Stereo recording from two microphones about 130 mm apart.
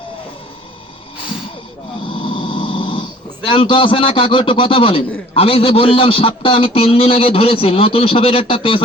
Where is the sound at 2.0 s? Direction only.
40° left (ahead or behind).